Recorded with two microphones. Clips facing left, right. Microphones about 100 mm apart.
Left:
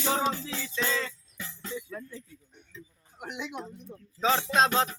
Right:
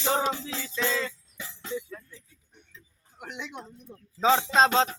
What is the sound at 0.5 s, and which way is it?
Music, 20° right (ahead or behind).